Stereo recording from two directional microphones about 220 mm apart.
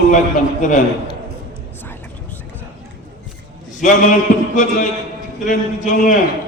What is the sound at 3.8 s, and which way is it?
Mantra, 35° left (ahead or behind).